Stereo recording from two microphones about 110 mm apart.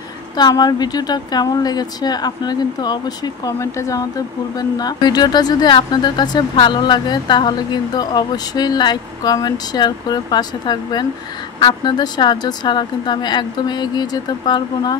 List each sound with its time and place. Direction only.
0.4 s speech: 40° left (ahead or behind)
3.4 s speech: 30° left (ahead or behind)